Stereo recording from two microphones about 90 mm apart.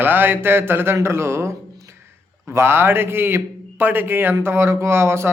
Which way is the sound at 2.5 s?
25° right (ahead or behind).